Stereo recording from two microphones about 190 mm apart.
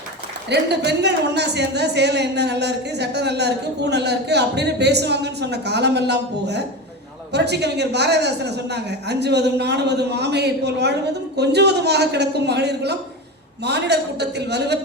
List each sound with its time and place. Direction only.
0.5 s speech: 60° right (ahead or behind)